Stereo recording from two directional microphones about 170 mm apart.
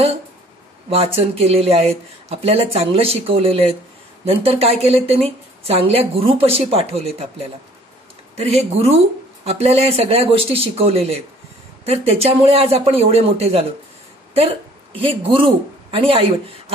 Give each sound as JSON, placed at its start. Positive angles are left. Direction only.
{"t": 0.8, "sound": "a woman's voice", "side_deg": -35}